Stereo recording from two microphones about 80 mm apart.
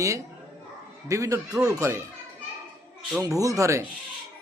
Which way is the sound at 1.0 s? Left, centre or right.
Right.